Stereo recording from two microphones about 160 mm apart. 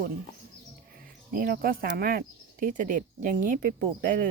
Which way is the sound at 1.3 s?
60° right (ahead or behind).